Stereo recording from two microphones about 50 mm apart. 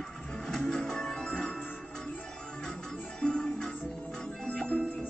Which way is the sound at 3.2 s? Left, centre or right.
Centre.